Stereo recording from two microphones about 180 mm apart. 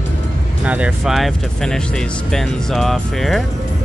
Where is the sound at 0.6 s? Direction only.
5° right (ahead or behind).